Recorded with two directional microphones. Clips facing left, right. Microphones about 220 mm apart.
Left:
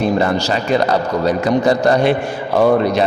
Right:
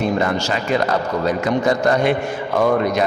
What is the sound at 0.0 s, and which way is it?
A man's voice, 35° left (ahead or behind).